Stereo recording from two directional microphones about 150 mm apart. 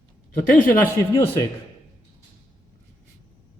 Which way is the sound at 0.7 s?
15° left (ahead or behind).